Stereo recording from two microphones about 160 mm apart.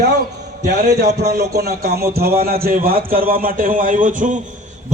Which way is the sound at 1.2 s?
85° right.